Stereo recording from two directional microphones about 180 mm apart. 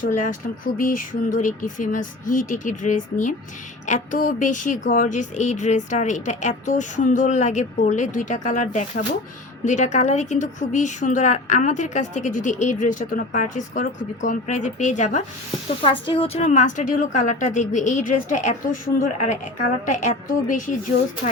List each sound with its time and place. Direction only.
0.2 s a woman's voice: 50° left (ahead or behind)
15.8 s a woman's voice: 30° left (ahead or behind); by 20.7 s 45° left (ahead or behind)